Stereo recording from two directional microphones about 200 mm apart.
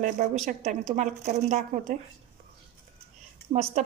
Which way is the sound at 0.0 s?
40° right (ahead or behind).